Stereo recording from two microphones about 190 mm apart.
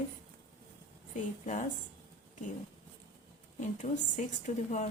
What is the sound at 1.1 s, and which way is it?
Speech, 40° left (ahead or behind).